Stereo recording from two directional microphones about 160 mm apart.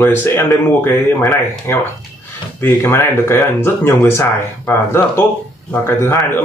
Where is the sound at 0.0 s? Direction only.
15° left (ahead or behind).